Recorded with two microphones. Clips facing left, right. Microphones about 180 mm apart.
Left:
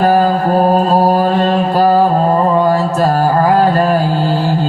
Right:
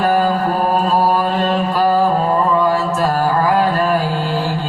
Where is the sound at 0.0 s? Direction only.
40° left (ahead or behind).